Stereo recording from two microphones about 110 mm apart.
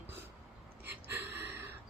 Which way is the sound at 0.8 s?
20° right (ahead or behind).